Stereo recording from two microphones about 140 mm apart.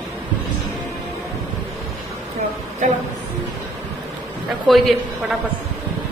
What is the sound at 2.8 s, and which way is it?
Speech, 60° right (ahead or behind).